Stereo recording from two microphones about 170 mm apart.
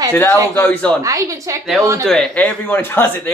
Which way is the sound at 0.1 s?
10° left (ahead or behind).